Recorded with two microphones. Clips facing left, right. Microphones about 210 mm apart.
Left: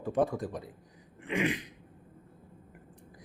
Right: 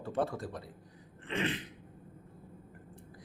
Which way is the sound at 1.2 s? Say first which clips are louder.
Left 4 dB; 10° left (ahead or behind).